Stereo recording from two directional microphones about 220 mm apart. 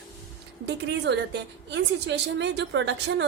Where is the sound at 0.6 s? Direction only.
50° right (ahead or behind).